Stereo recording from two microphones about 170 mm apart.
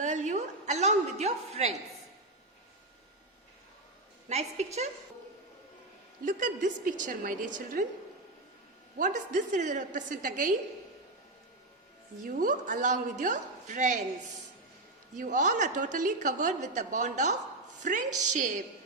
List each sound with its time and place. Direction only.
0.0 s a sound: 45° right (ahead or behind)
4.3 s a woman's voice: 40° right (ahead or behind)
6.2 s a woman's voice: 50° right (ahead or behind)
9.0 s a woman's voice: 50° right (ahead or behind)
12.2 s a woman's voice: 55° right (ahead or behind)
15.1 s a woman's voice: 50° right (ahead or behind)